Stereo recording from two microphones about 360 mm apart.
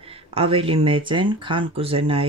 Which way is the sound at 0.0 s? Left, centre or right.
Centre.